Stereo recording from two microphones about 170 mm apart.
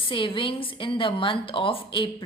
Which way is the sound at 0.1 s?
30° left (ahead or behind).